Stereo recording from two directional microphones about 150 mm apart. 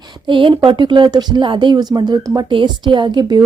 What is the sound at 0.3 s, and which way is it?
Speech, 35° right (ahead or behind).